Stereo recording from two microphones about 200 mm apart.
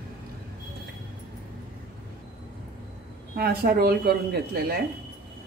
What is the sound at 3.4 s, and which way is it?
Speech, 50° right (ahead or behind).